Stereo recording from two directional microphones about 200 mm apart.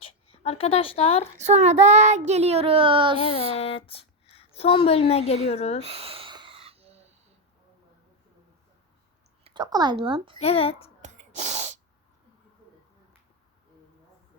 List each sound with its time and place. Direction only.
0.0 s a woman's voice: 30° left (ahead or behind)
1.4 s speech: 35° right (ahead or behind)
3.2 s a woman's voice: 30° left (ahead or behind)
5.8 s a sound: 30° right (ahead or behind)
9.4 s a woman's voice: 20° right (ahead or behind)
10.4 s a woman's voice: 30° left (ahead or behind)
11.0 s sneeze: 35° right (ahead or behind)